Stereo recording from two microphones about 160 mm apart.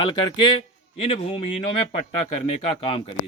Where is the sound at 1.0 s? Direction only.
35° left (ahead or behind).